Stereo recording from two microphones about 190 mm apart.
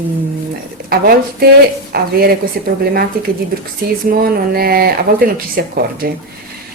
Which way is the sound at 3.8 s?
50° right (ahead or behind).